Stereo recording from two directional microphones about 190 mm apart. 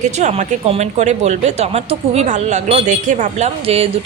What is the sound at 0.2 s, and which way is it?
Speech, 35° right (ahead or behind).